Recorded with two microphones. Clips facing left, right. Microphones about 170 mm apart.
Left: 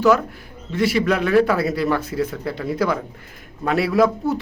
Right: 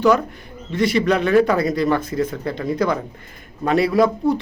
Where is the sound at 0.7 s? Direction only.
5° left (ahead or behind).